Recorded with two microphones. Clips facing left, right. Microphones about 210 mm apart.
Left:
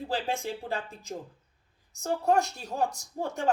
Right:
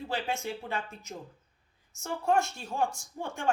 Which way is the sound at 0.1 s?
35° left (ahead or behind).